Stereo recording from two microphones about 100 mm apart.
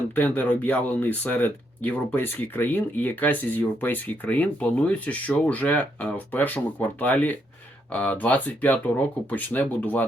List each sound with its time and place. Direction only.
0.1 s speech: 15° left (ahead or behind)